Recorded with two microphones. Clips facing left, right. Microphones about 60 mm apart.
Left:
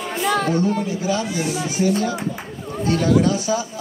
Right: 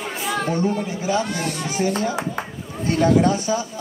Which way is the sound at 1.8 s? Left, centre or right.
Right.